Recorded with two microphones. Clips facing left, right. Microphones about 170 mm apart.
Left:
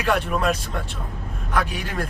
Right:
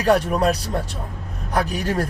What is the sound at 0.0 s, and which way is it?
A man's voice, 40° right (ahead or behind).